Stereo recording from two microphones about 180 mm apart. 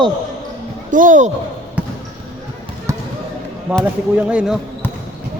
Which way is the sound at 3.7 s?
5° right (ahead or behind).